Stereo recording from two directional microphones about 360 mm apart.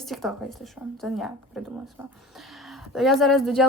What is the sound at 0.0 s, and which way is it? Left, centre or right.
A woman's voice, centre.